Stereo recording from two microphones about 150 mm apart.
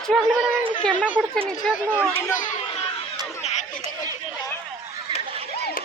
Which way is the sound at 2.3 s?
60° left (ahead or behind).